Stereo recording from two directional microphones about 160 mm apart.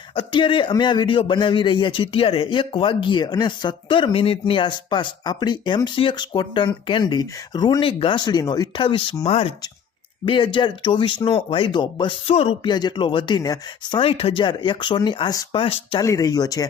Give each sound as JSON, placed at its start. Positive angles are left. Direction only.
{"t": 0.2, "sound": "speech", "side_deg": 30}
{"t": 10.2, "sound": "speech", "side_deg": 30}
{"t": 14.0, "sound": "speech", "side_deg": 35}
{"t": 16.0, "sound": "speech", "side_deg": 25}